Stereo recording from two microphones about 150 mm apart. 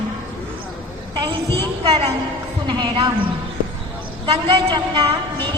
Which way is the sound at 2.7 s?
30° right (ahead or behind).